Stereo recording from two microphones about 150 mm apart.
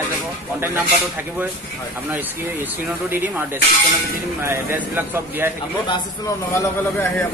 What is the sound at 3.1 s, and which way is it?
Speech, 15° right (ahead or behind).